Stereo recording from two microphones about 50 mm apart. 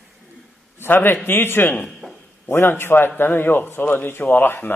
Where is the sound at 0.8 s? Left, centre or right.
Left.